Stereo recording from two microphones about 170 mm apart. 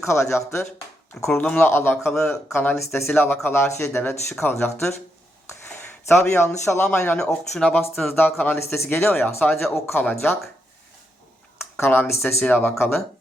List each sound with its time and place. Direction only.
0.0 s speech: 15° left (ahead or behind)
4.3 s speech: 5° left (ahead or behind)
5.6 s speech: 10° left (ahead or behind)
11.8 s speech: 15° left (ahead or behind)